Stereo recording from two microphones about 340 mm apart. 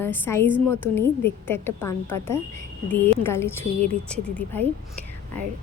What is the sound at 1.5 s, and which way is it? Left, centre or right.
Speech, centre.